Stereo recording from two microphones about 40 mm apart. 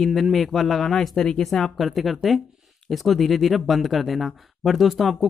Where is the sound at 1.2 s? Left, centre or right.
Centre.